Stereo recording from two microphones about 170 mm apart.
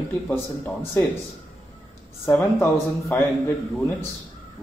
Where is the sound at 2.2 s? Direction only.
15° left (ahead or behind).